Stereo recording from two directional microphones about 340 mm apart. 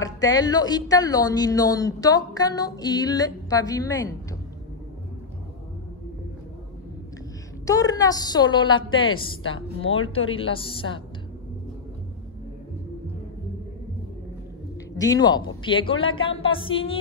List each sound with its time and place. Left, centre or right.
0.0 s speech: centre
7.6 s speech: centre
9.6 s speech: left
10.1 s speech: centre
15.0 s speech: centre